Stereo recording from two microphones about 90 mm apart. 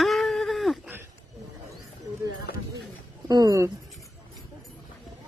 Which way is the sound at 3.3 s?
45° right (ahead or behind).